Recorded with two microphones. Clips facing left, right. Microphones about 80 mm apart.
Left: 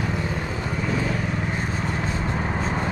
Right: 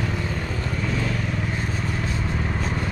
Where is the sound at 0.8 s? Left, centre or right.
Centre.